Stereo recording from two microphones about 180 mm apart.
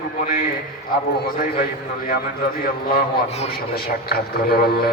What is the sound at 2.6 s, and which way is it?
A man's voice, 55° left (ahead or behind).